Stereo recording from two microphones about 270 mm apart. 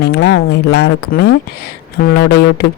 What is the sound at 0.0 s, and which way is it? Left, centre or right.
Speech, left.